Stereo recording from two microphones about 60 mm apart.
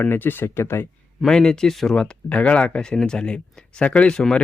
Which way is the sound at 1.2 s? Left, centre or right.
Centre.